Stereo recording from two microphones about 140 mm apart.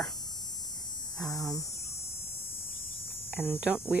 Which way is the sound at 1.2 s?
Centre (ahead or behind).